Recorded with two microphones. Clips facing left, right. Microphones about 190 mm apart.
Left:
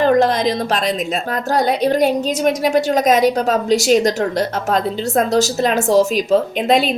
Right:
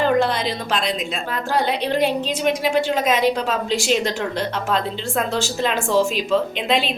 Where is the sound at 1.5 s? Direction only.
40° left (ahead or behind).